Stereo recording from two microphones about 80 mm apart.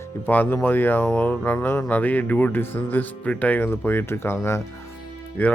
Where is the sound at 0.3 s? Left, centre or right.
Left.